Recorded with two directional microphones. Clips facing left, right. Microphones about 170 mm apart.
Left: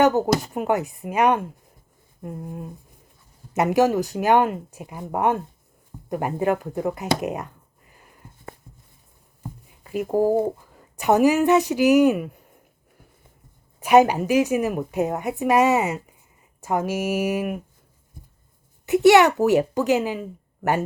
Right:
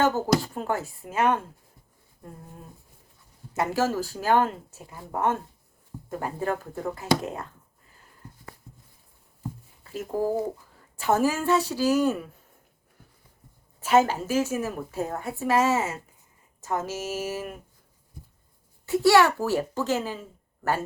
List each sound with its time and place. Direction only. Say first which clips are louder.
0.0 s a woman's voice: left 4 dB; 20° left (ahead or behind)
3.5 s a woman's voice: left 7 dB; 20° left (ahead or behind)
10.1 s speech: left 6 dB; 40° left (ahead or behind)
10.9 s a woman's voice: left 6 dB; 15° left (ahead or behind)
13.7 s a woman's voice: left 5 dB; 15° left (ahead or behind)
18.9 s a woman's voice: left 5 dB; 20° left (ahead or behind)